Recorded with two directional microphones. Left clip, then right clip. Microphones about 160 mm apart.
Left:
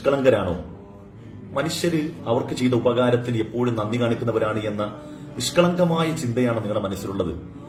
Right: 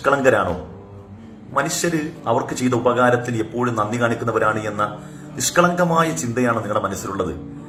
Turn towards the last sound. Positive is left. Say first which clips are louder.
# right 4 dB
turn(degrees=20)  # may be behind; listen again after turning